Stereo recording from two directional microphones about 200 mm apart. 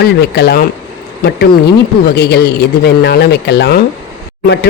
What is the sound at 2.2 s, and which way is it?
A man's voice, 55° left (ahead or behind).